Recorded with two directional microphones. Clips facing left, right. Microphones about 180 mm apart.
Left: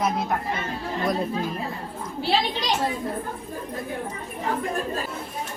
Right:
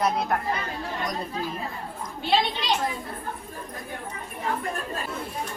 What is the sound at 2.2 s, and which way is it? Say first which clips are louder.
Speech: even; 40° left (ahead or behind).